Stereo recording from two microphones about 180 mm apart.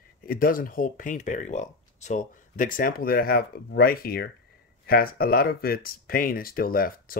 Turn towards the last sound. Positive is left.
turn(degrees=55)  # may be behind; listen again after turning